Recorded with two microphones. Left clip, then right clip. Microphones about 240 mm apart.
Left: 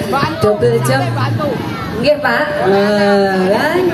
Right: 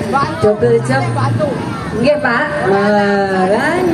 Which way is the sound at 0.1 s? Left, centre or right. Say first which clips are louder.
Right 1 dB; left.